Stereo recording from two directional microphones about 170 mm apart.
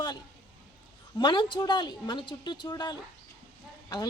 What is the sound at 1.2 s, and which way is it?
Speech, 25° left (ahead or behind).